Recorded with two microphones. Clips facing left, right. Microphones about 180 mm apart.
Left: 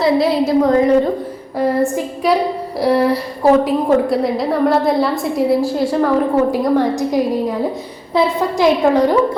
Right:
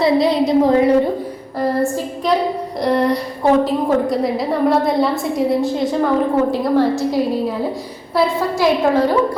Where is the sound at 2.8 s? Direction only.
5° left (ahead or behind).